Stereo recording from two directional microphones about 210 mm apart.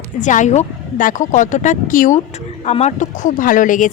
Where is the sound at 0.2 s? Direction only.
35° left (ahead or behind).